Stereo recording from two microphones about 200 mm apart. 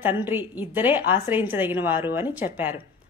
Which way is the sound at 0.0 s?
10° right (ahead or behind).